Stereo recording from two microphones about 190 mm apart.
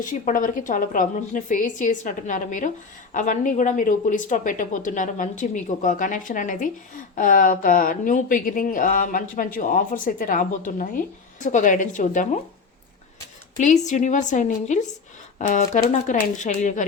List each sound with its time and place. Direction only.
0.0 s a woman's voice: 40° left (ahead or behind)
13.6 s speech: 40° left (ahead or behind)